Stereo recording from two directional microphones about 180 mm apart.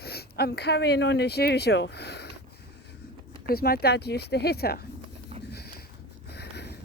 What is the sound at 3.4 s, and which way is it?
Speech, 55° left (ahead or behind).